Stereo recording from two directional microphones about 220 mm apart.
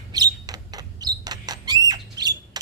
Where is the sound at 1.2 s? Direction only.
20° right (ahead or behind).